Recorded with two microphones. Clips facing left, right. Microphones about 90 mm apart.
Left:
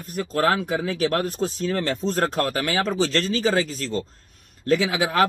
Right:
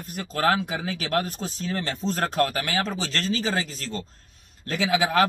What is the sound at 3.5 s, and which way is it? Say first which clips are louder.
Speech: left 5 dB; 35° right (ahead or behind).